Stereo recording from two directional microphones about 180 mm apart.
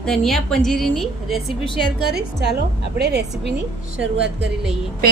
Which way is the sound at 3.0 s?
65° right (ahead or behind).